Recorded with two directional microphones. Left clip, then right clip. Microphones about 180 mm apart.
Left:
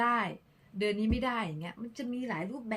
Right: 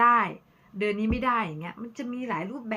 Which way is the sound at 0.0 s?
40° left (ahead or behind).